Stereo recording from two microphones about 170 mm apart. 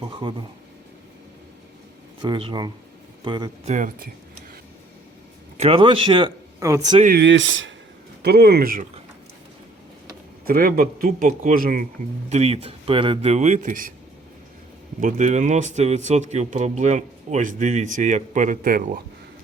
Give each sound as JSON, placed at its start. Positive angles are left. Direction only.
{"t": 0.0, "sound": "speech", "side_deg": -30}
{"t": 2.2, "sound": "speech", "side_deg": -30}
{"t": 3.7, "sound": "speech", "side_deg": -50}
{"t": 5.5, "sound": "speech", "side_deg": -35}
{"t": 6.6, "sound": "speech", "side_deg": -20}
{"t": 7.2, "sound": "speech", "side_deg": -90}
{"t": 8.2, "sound": "speech", "side_deg": -70}
{"t": 10.4, "sound": "a man's voice", "side_deg": -55}
{"t": 12.3, "sound": "speech", "side_deg": -40}
{"t": 15.0, "sound": "speech", "side_deg": -45}